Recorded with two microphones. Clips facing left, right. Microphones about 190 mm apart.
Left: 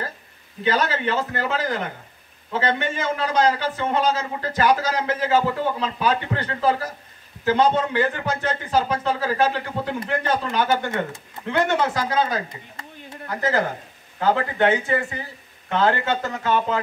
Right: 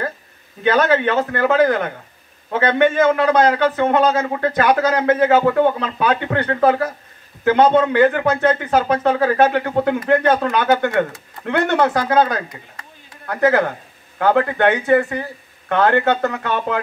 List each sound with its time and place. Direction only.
0.7 s a man's voice: 60° right (ahead or behind)